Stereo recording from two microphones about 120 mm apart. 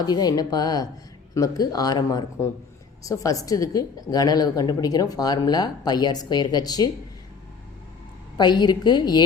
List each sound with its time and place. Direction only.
0.0 s a woman's voice: 35° left (ahead or behind)
8.4 s a woman's voice: 35° left (ahead or behind)